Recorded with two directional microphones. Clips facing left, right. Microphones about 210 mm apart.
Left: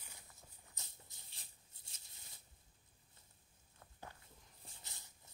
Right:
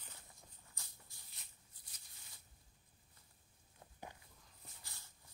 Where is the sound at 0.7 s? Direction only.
20° left (ahead or behind).